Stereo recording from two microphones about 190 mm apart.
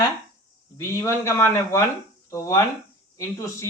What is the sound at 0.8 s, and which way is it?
Speech, 15° left (ahead or behind).